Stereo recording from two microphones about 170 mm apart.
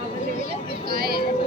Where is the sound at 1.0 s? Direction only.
65° right (ahead or behind).